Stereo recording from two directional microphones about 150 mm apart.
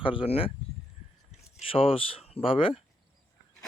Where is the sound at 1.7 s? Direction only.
40° left (ahead or behind).